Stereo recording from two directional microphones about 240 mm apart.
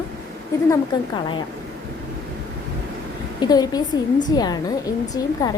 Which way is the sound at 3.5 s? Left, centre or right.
Centre.